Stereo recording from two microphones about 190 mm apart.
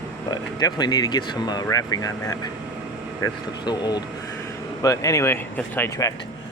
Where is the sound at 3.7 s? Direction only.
20° left (ahead or behind).